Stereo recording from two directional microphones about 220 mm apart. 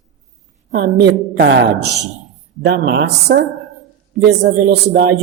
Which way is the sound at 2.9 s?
50° right (ahead or behind).